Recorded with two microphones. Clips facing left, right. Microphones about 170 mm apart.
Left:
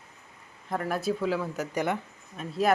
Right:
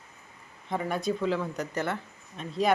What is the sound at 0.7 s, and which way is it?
Speech, centre (ahead or behind).